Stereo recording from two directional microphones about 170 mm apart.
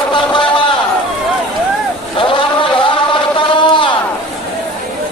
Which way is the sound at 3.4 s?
30° left (ahead or behind).